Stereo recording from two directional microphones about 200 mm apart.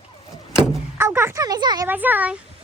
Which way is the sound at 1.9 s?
10° right (ahead or behind).